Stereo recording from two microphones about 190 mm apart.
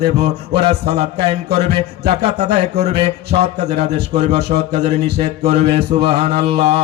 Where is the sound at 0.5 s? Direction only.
60° right (ahead or behind).